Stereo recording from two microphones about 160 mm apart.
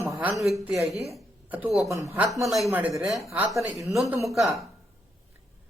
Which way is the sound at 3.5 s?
20° right (ahead or behind).